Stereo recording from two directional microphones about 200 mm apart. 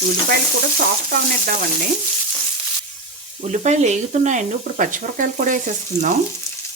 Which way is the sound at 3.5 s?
35° right (ahead or behind).